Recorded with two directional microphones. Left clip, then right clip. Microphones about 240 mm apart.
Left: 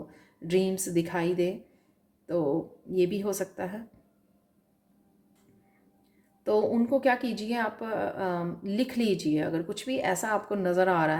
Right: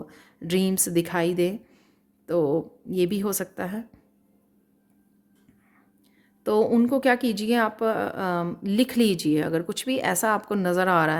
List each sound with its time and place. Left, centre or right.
0.1 s speech: right
6.4 s speech: right